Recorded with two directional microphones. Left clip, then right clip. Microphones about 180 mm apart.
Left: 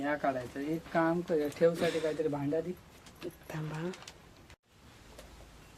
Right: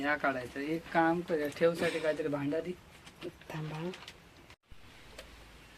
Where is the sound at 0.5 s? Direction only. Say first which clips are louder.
Right 1 dB; 20° left (ahead or behind).